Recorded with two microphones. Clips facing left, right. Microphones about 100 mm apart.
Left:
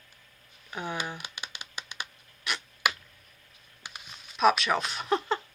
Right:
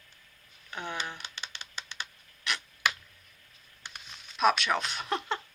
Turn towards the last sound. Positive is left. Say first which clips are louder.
# left 4 dB
turn(degrees=5)  # may be behind; listen again after turning